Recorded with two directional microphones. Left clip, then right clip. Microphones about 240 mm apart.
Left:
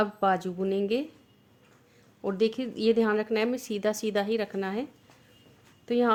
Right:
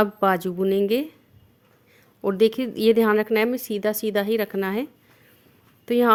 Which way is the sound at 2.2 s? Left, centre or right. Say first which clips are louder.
Right 7 dB; right.